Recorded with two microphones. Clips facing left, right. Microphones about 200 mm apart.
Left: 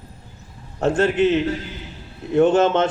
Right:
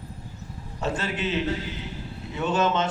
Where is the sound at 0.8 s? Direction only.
50° left (ahead or behind).